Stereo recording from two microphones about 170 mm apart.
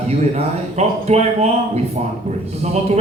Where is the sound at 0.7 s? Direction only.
40° right (ahead or behind).